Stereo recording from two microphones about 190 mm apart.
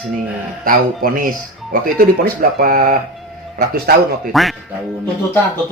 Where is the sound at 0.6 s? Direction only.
50° right (ahead or behind).